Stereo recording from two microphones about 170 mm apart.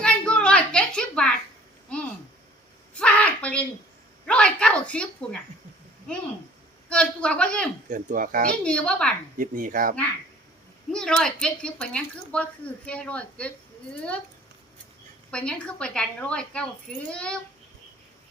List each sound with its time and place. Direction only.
0.0 s a sound: 5° left (ahead or behind)
3.0 s a sound: 5° left (ahead or behind)
6.8 s a woman's voice: 5° left (ahead or behind)
7.9 s speech: 55° right (ahead or behind)
8.6 s a woman's voice: 5° left (ahead or behind)
9.4 s a child's voice: 55° right (ahead or behind)
10.9 s a woman's voice: 5° left (ahead or behind)
15.3 s a woman's voice: 5° left (ahead or behind)